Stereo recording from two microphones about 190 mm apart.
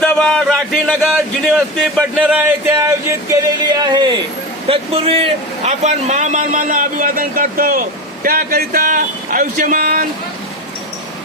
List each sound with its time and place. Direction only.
0.0 s a man's voice: 5° left (ahead or behind); by 10.1 s 45° right (ahead or behind)